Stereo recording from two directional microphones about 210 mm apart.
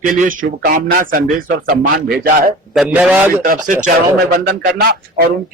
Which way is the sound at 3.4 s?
40° right (ahead or behind).